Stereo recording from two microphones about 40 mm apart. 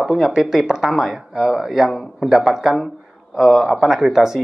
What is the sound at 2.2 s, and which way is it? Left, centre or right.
Speech, centre.